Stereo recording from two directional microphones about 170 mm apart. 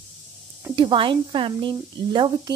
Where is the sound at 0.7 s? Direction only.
30° right (ahead or behind).